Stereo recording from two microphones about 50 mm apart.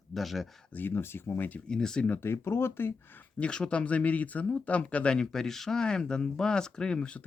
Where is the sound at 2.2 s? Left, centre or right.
Left.